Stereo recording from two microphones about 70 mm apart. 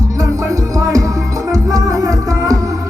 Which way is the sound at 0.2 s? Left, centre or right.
Right.